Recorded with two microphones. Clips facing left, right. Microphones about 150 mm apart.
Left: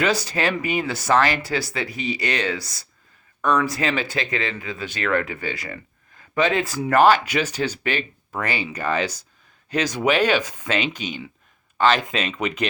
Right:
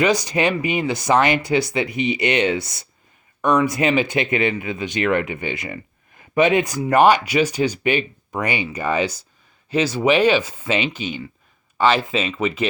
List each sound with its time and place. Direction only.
0.0 s speech: 15° right (ahead or behind)